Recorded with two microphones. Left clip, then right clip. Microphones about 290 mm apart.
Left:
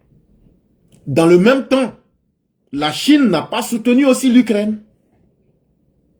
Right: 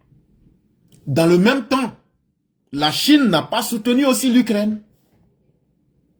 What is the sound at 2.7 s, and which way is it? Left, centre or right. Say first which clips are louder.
Speech: even; right.